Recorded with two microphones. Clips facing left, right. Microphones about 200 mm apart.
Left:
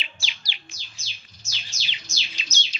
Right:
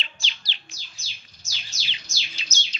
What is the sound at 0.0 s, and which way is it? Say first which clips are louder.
Bird: even; 10° left (ahead or behind).